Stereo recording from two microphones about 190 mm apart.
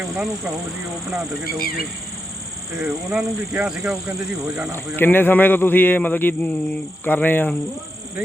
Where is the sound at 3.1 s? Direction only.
5° right (ahead or behind).